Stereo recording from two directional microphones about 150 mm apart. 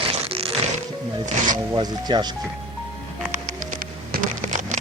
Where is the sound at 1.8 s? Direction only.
30° right (ahead or behind).